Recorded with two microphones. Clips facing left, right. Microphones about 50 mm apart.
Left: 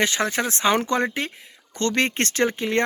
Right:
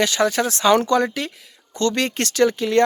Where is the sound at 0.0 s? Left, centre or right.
Left.